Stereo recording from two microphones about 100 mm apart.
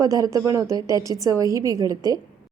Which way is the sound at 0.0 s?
35° right (ahead or behind).